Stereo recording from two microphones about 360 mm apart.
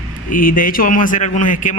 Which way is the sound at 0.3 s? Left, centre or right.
Left.